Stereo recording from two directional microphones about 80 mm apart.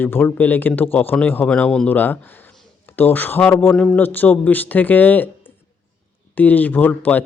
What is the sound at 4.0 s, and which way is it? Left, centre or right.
Speech, left.